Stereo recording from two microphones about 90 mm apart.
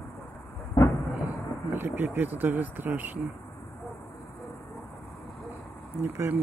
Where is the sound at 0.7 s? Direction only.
40° left (ahead or behind).